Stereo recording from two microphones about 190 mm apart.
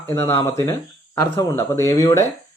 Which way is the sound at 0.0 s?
15° left (ahead or behind).